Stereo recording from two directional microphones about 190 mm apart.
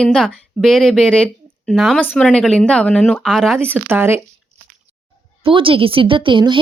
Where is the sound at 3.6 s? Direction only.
10° right (ahead or behind).